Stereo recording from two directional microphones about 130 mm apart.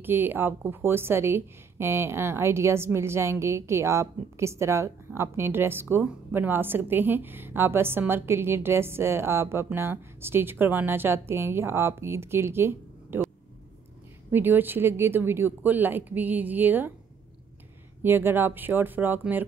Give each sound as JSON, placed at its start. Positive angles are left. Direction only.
{"t": 0.0, "sound": "a woman's voice", "side_deg": -15}
{"t": 14.3, "sound": "speech", "side_deg": -15}
{"t": 18.0, "sound": "speech", "side_deg": -15}